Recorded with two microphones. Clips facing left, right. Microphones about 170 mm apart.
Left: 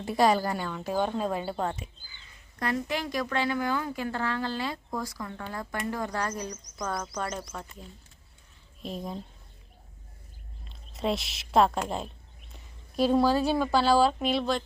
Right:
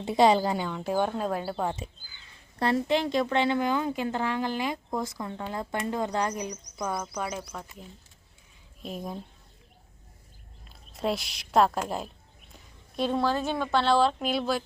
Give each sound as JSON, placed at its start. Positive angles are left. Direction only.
{"t": 0.0, "sound": "speech", "side_deg": -20}
{"t": 2.6, "sound": "speech", "side_deg": -30}
{"t": 8.8, "sound": "speech", "side_deg": -5}
{"t": 10.7, "sound": "a woman's voice", "side_deg": 0}